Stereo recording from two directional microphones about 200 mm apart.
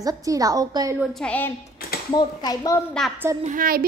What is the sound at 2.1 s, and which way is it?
Speech, 20° left (ahead or behind).